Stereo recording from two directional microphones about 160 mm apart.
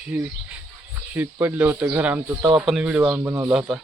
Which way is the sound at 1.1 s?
10° right (ahead or behind).